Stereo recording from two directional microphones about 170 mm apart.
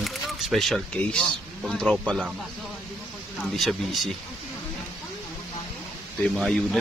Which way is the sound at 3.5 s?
Centre (ahead or behind).